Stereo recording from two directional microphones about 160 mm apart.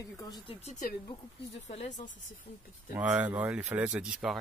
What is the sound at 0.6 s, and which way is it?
Speech, 45° left (ahead or behind).